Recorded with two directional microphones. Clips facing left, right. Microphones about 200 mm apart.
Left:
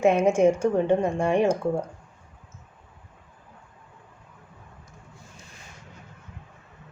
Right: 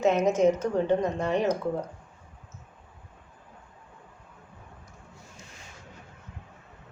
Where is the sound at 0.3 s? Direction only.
10° left (ahead or behind).